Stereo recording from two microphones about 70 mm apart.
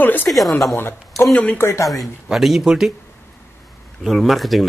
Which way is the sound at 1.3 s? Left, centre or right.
Centre.